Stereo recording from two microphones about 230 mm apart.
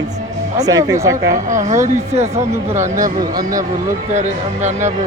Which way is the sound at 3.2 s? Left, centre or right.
Centre.